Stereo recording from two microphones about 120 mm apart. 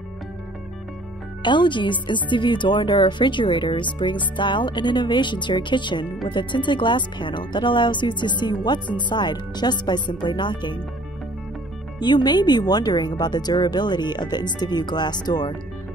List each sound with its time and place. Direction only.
1.4 s speech: 40° left (ahead or behind)
12.0 s speech: 35° left (ahead or behind)